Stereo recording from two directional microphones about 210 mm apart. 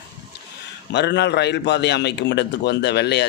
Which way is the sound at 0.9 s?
55° left (ahead or behind).